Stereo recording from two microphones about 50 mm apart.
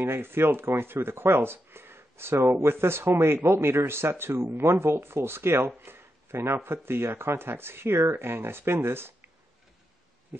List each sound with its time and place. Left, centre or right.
0.0 s speech: right